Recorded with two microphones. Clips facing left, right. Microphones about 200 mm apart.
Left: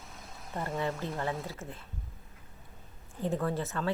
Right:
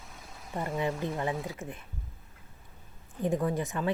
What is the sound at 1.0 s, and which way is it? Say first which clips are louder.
Speech: right 3 dB; 15° right (ahead or behind).